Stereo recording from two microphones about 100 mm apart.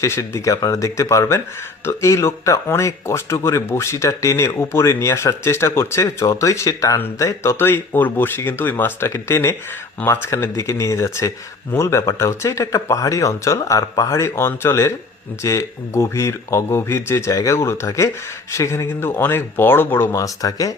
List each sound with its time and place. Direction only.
0.0 s speech: 30° left (ahead or behind)
20.1 s speech: 35° left (ahead or behind)